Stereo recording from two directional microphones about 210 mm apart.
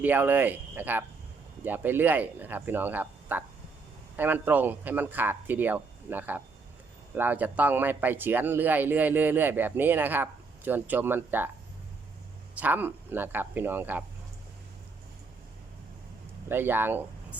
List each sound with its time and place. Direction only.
0.0 s speech: 10° right (ahead or behind)
12.5 s speech: 10° right (ahead or behind)
16.5 s speech: 10° right (ahead or behind)